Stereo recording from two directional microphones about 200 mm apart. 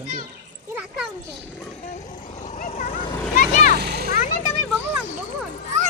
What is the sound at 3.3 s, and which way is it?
Vehicle, 40° left (ahead or behind).